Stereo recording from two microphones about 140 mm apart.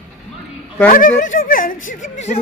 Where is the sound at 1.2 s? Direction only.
75° left (ahead or behind); by 2.4 s 55° left (ahead or behind).